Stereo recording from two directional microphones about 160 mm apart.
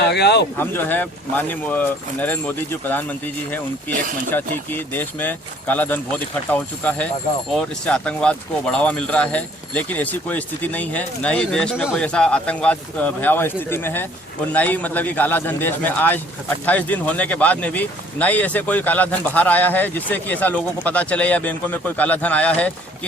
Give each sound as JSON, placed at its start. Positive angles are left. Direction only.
{"t": 0.1, "sound": "speech", "side_deg": 90}
{"t": 0.5, "sound": "speech", "side_deg": 15}